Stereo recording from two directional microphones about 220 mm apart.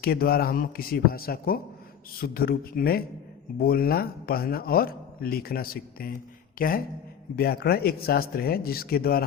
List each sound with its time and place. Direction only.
0.0 s a man's voice: 45° left (ahead or behind)